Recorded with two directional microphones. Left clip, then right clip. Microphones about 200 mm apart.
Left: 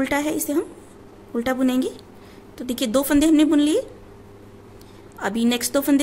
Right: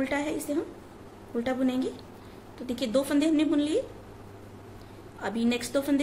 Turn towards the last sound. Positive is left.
turn(degrees=40)  # may be behind; listen again after turning